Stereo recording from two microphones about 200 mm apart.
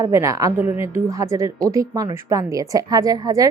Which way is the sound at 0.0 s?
15° right (ahead or behind).